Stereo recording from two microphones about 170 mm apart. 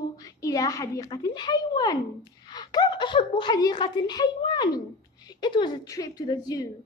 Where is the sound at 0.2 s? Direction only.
20° left (ahead or behind).